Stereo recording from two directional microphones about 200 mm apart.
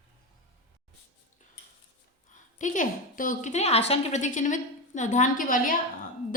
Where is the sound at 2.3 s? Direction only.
40° left (ahead or behind).